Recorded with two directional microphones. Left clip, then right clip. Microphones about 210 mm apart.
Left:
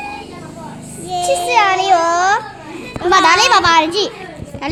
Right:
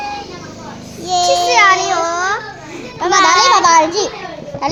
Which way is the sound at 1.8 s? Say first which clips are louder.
Left 4 dB; 20° left (ahead or behind).